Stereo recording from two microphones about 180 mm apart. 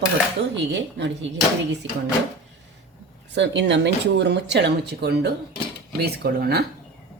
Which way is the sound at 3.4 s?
80° right.